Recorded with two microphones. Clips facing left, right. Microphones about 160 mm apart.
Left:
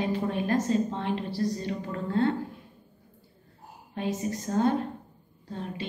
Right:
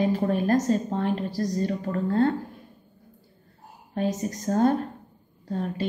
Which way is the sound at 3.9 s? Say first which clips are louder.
Right 3 dB; 45° right (ahead or behind).